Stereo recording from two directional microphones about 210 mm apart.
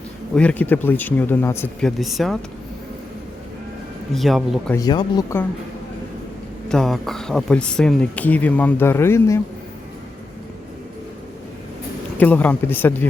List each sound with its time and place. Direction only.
0.3 s speech: 5° left (ahead or behind)
4.1 s speech: centre (ahead or behind)
4.7 s speech: 20° left (ahead or behind)
6.7 s speech: centre (ahead or behind)
12.1 s speech: 5° left (ahead or behind)